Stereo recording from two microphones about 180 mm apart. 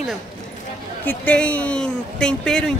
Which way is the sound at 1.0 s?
10° left (ahead or behind).